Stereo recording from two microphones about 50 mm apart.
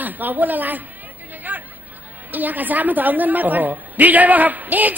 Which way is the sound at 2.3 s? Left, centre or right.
Right.